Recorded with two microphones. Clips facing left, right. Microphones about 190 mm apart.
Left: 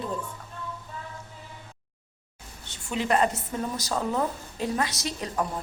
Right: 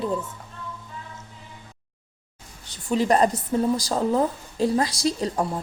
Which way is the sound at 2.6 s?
35° right (ahead or behind).